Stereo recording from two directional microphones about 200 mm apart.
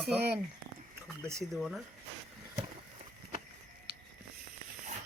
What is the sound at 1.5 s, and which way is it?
Speech, centre (ahead or behind).